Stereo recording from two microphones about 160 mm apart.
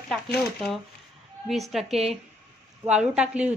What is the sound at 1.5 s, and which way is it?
A woman's voice, centre (ahead or behind).